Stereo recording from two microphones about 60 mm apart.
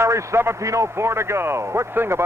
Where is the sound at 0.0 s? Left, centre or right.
Right.